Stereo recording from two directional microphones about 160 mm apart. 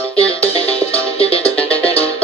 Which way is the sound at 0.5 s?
35° left (ahead or behind).